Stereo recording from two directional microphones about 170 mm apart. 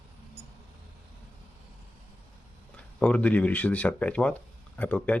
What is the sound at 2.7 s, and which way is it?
Speech, 5° left (ahead or behind).